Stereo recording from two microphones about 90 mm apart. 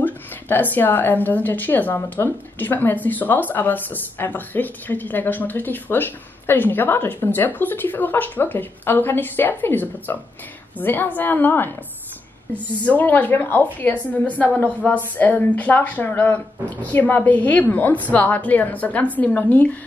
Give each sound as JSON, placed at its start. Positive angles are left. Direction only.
{"t": 0.0, "sound": "a woman's voice", "side_deg": 20}
{"t": 12.8, "sound": "a woman's voice", "side_deg": 20}